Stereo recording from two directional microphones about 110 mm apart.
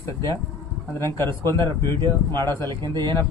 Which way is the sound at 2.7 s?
40° right (ahead or behind).